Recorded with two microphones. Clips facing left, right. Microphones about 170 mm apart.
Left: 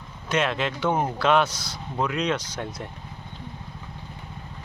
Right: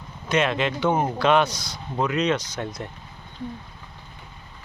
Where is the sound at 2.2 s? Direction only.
10° left (ahead or behind).